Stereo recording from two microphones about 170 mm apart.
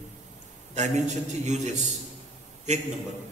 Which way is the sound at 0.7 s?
45° right (ahead or behind).